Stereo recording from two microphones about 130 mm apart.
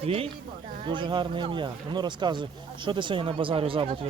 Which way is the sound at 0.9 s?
35° right (ahead or behind).